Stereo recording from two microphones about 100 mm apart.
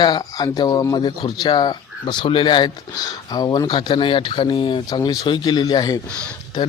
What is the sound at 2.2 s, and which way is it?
Speech, 60° left (ahead or behind).